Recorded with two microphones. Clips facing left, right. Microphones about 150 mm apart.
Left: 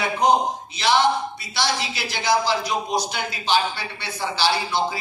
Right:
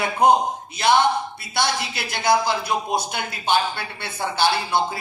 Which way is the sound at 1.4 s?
55° right (ahead or behind).